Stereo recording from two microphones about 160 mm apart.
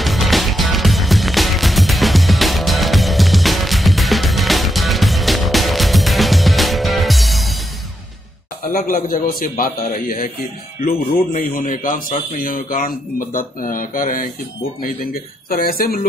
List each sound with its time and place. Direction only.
0.0 s music: centre (ahead or behind)
8.7 s a man's voice: 60° left (ahead or behind)
15.5 s speech: 65° left (ahead or behind)